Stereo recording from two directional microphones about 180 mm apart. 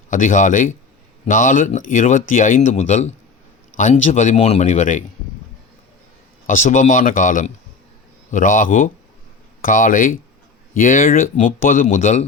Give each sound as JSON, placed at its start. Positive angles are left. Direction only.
{"t": 0.1, "sound": "speech", "side_deg": 45}
{"t": 6.5, "sound": "speech", "side_deg": 45}